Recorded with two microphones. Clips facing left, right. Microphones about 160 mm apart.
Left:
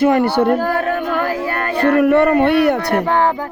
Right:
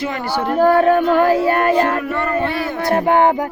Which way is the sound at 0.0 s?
60° left (ahead or behind).